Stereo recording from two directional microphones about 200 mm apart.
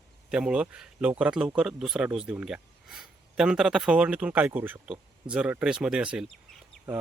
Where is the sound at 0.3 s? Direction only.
5° right (ahead or behind).